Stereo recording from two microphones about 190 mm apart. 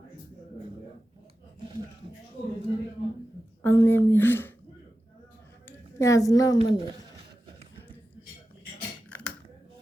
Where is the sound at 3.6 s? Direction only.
10° left (ahead or behind).